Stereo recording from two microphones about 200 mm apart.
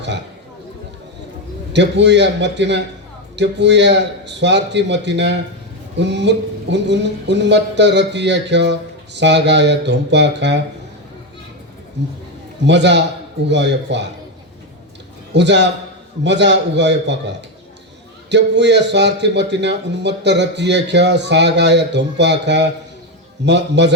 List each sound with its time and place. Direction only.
1.7 s speech: 60° right (ahead or behind)
12.0 s speech: 60° right (ahead or behind)
15.3 s speech: 60° right (ahead or behind)
18.3 s speech: 60° right (ahead or behind)